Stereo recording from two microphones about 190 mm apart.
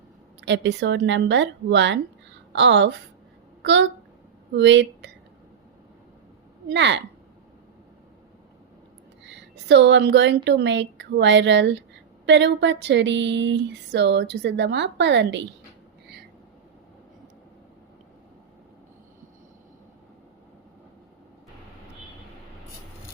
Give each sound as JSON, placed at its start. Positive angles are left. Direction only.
{"t": 0.4, "sound": "a woman's voice", "side_deg": -70}
{"t": 6.7, "sound": "speech", "side_deg": -70}
{"t": 9.2, "sound": "a woman's voice", "side_deg": -65}